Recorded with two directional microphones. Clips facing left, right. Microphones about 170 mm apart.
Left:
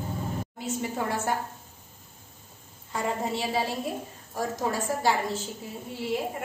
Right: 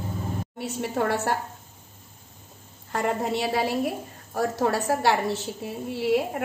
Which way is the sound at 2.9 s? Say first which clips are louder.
Right 4 dB; 65° right (ahead or behind).